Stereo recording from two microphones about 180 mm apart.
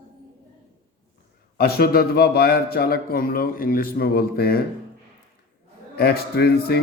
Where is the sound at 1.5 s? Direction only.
60° left (ahead or behind).